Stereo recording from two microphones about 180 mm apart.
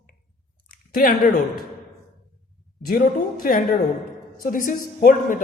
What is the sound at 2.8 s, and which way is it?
A man's voice, 55° left (ahead or behind).